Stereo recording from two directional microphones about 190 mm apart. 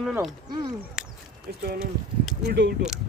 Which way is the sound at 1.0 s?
5° right (ahead or behind).